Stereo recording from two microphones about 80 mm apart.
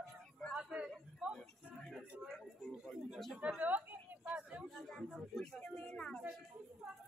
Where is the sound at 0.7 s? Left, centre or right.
Centre.